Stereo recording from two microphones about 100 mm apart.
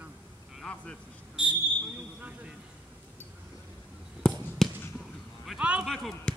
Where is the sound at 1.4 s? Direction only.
10° right (ahead or behind).